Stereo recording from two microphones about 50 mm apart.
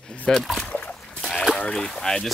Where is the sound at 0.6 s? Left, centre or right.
Left.